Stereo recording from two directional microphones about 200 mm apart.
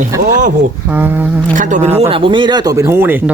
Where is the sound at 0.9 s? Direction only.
10° right (ahead or behind).